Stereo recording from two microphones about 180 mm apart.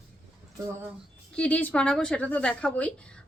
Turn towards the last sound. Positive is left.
turn(degrees=5)  # may be behind; listen again after turning